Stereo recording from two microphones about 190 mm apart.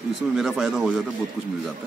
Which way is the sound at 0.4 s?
Centre (ahead or behind).